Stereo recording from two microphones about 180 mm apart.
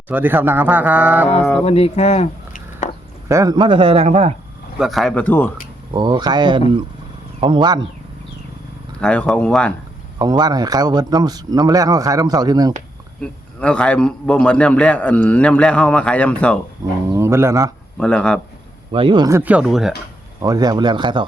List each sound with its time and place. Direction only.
0.1 s a man's voice: 10° right (ahead or behind)
1.6 s speech: 35° left (ahead or behind)
3.2 s speech: 20° right (ahead or behind); by 4.3 s 35° right (ahead or behind)
4.8 s speech: centre (ahead or behind)
5.9 s speech: 25° right (ahead or behind)
9.0 s speech: 5° left (ahead or behind)
10.2 s speech: 25° right (ahead or behind)
13.2 s a man's voice: 5° left (ahead or behind)
17.1 s a man's voice: 15° right (ahead or behind)
18.0 s speech: 5° left (ahead or behind)
18.9 s speech: 30° right (ahead or behind)
19.4 s speech: 5° right (ahead or behind)
20.4 s speech: 20° right (ahead or behind)